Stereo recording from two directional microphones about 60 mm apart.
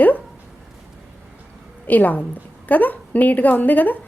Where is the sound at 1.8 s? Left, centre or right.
Left.